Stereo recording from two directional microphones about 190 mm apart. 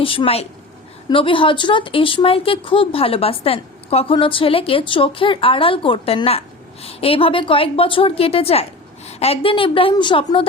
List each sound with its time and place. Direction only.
0.0 s speech: 30° left (ahead or behind)